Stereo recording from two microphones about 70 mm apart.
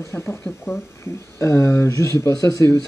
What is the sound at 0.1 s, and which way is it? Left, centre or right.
Speech, left.